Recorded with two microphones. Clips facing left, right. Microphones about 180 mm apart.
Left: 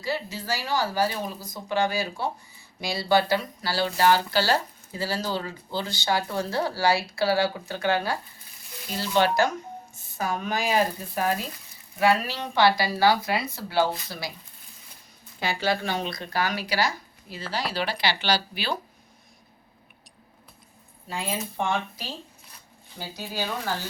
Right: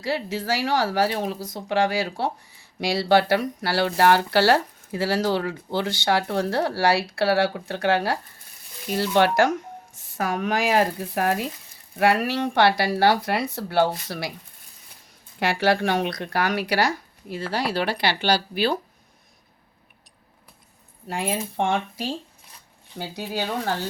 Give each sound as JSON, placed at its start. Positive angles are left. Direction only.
{"t": 0.0, "sound": "speech", "side_deg": -80}
{"t": 8.9, "sound": "speech", "side_deg": -65}
{"t": 15.4, "sound": "speech", "side_deg": -75}
{"t": 21.1, "sound": "speech", "side_deg": -60}